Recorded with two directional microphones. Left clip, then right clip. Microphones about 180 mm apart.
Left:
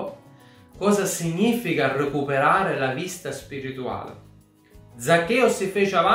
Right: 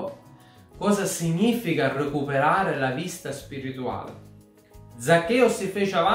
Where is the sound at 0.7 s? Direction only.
15° left (ahead or behind).